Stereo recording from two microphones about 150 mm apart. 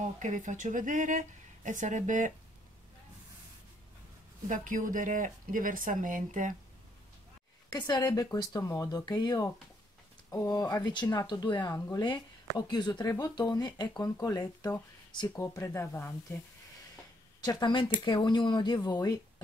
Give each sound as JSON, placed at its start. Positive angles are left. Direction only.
{"t": 0.0, "sound": "speech", "side_deg": -55}
{"t": 4.5, "sound": "speech", "side_deg": -60}
{"t": 7.9, "sound": "speech", "side_deg": 25}
{"t": 17.4, "sound": "speech", "side_deg": 30}